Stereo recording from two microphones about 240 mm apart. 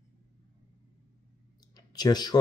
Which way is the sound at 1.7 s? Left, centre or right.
Centre.